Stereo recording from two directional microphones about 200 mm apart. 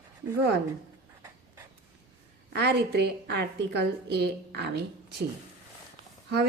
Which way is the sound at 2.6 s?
55° right (ahead or behind).